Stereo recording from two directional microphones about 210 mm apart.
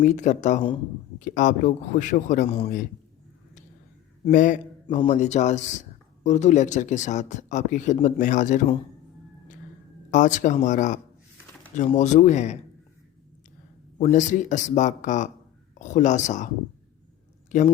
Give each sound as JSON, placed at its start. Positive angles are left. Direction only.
{"t": 0.0, "sound": "speech", "side_deg": 35}
{"t": 4.3, "sound": "speech", "side_deg": 40}
{"t": 10.1, "sound": "speech", "side_deg": 35}
{"t": 14.0, "sound": "speech", "side_deg": 35}
{"t": 17.5, "sound": "speech", "side_deg": 35}